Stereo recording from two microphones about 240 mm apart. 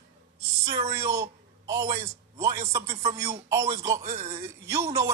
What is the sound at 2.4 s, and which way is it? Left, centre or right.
A man's voice, centre.